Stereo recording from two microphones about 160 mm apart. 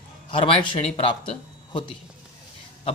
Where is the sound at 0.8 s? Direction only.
35° left (ahead or behind).